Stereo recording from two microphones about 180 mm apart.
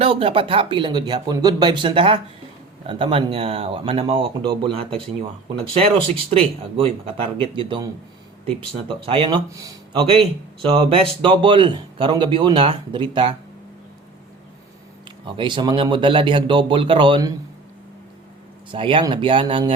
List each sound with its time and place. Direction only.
0.0 s speech: 30° right (ahead or behind)
5.9 s speech: 30° right (ahead or behind)
8.9 s speech: 30° right (ahead or behind)
9.5 s speech: 20° right (ahead or behind)
9.9 s speech: 30° right (ahead or behind)
15.3 s speech: 25° right (ahead or behind)
18.7 s speech: 30° right (ahead or behind)